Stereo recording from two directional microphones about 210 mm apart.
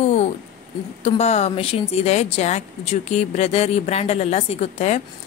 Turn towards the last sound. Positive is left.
turn(degrees=30)  # may be behind; listen again after turning